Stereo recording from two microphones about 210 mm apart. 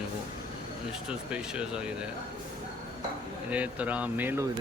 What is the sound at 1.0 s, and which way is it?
Speech, 5° right (ahead or behind).